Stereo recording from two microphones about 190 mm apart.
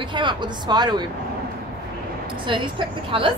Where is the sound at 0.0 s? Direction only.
25° right (ahead or behind).